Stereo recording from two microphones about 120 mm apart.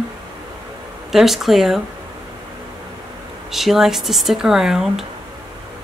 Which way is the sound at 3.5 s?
Centre (ahead or behind).